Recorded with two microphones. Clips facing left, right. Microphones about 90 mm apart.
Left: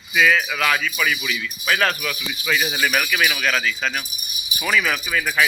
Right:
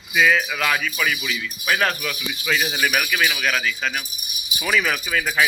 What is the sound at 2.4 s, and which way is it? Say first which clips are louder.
Speech: left 1 dB; 30° right (ahead or behind).